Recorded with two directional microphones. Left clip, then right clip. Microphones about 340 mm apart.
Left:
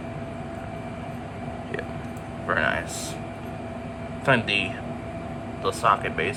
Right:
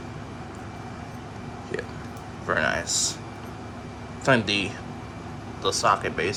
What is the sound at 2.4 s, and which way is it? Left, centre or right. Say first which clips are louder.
Speech: even; centre.